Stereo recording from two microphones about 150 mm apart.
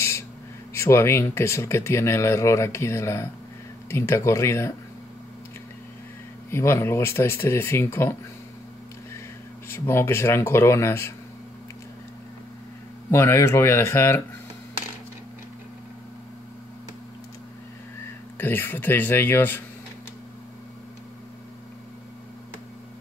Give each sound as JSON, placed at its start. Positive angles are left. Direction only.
{"t": 0.7, "sound": "speech", "side_deg": 20}
{"t": 6.5, "sound": "speech", "side_deg": 15}
{"t": 9.7, "sound": "speech", "side_deg": 15}
{"t": 13.1, "sound": "speech", "side_deg": 15}
{"t": 18.4, "sound": "speech", "side_deg": 15}